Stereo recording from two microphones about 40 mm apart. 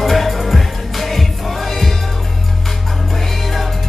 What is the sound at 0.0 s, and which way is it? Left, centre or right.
Music, centre.